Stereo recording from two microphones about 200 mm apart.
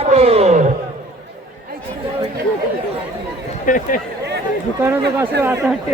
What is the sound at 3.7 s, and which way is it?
Speech, 40° left (ahead or behind).